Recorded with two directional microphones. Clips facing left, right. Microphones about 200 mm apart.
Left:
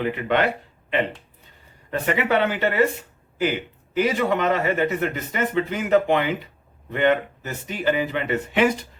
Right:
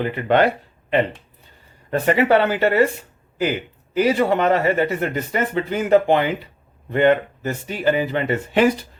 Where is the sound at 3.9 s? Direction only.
35° right (ahead or behind).